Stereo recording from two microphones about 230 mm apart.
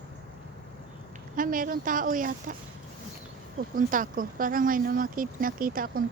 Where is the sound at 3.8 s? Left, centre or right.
Right.